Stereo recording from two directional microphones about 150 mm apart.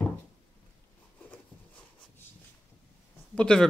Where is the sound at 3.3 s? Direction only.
5° left (ahead or behind).